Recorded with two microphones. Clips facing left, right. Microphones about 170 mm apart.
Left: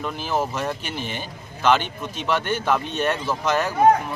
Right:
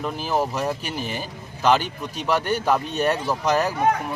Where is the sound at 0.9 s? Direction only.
40° right (ahead or behind).